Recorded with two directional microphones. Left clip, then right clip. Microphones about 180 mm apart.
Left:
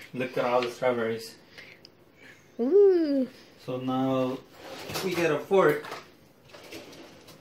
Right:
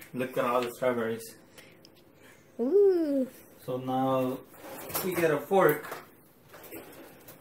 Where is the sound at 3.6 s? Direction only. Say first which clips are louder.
Even; 20° left (ahead or behind).